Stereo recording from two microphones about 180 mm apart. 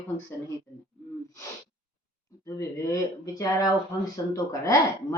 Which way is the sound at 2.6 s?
15° left (ahead or behind).